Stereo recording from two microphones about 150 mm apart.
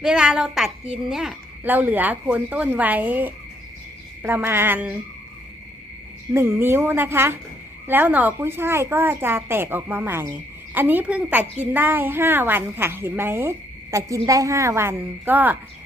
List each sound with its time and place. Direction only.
0.0 s a woman's voice: 5° right (ahead or behind)
6.3 s a woman's voice: 15° right (ahead or behind)